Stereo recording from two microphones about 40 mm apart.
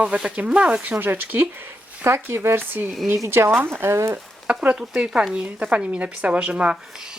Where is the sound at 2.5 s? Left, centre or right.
Right.